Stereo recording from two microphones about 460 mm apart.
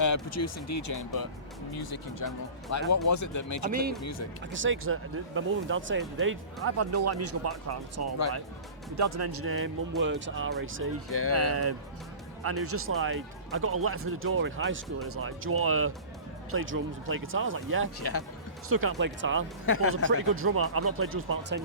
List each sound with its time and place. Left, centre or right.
0.0 s speech: left
3.7 s speech: centre
4.0 s speech: left
4.5 s speech: right
11.1 s speech: left
11.3 s speech: right
19.6 s speech: left
20.1 s speech: right